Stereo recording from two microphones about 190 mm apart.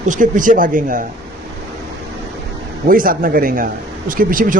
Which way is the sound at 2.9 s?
45° right (ahead or behind).